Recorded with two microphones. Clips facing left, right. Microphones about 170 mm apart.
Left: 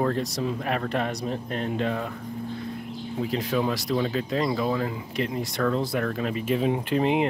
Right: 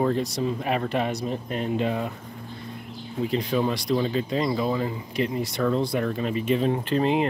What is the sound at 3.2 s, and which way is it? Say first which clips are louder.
Speech: right 2 dB; centre (ahead or behind).